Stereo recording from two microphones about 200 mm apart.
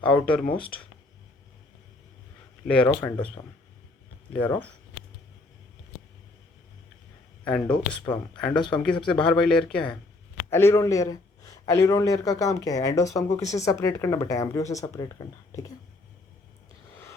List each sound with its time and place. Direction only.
0.3 s speech: 5° left (ahead or behind)
2.6 s speech: 5° left (ahead or behind)
4.3 s a man's voice: 10° left (ahead or behind)
7.4 s a man's voice: 5° left (ahead or behind)